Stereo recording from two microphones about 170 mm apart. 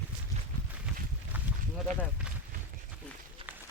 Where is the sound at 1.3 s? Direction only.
10° right (ahead or behind).